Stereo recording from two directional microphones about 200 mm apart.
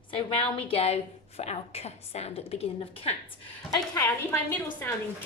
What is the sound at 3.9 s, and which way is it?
A woman's voice, 10° left (ahead or behind).